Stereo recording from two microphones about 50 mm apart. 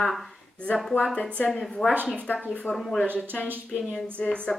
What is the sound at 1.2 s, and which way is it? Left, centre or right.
Speech, left.